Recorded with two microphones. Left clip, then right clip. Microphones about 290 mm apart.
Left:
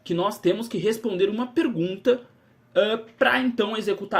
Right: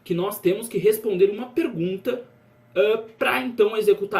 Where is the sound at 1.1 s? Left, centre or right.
Left.